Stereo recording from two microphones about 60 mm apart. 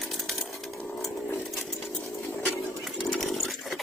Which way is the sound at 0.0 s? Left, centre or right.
Centre.